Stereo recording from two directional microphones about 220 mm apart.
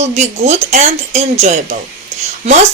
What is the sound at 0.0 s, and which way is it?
Speech, 30° right (ahead or behind).